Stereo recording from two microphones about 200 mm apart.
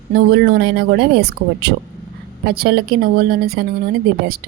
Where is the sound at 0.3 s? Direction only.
55° right (ahead or behind).